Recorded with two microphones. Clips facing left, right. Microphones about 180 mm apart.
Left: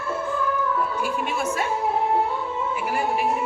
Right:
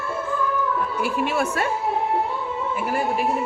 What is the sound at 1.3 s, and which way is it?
Speech, 65° right (ahead or behind).